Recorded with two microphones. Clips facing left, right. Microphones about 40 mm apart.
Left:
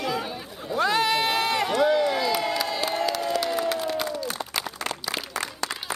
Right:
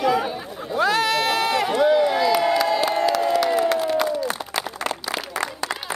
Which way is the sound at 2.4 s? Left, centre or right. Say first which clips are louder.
Right 7 dB; centre.